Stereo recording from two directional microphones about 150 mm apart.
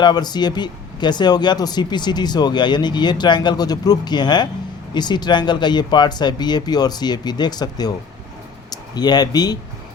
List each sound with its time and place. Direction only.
0.0 s speech: 30° left (ahead or behind)